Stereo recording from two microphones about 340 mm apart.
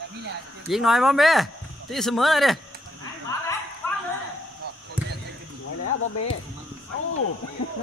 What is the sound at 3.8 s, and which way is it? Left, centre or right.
Bow-wow, centre.